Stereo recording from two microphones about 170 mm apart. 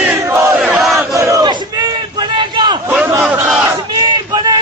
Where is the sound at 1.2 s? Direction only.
20° right (ahead or behind).